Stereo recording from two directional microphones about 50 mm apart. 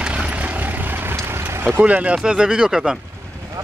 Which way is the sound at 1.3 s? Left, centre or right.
Right.